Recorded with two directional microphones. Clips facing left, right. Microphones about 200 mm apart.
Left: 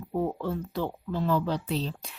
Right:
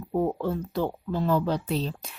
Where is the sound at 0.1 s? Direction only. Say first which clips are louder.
Right 3 dB; 45° right (ahead or behind).